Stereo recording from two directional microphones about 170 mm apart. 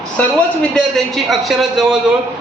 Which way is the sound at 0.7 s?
Centre (ahead or behind).